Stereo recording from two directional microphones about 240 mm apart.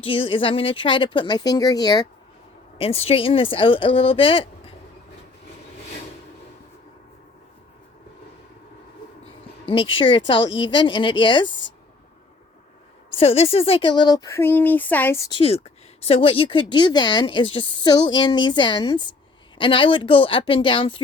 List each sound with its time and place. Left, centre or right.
0.0 s a woman's voice: left
9.2 s a woman's voice: left
13.1 s speech: left
15.4 s a woman's voice: left